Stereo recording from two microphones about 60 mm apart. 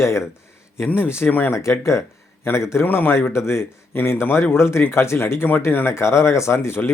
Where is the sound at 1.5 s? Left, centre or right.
Left.